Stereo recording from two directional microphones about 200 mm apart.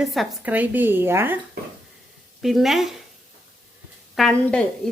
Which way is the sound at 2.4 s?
Centre (ahead or behind).